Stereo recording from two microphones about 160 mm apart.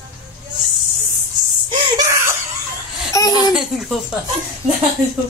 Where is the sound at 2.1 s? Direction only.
15° right (ahead or behind).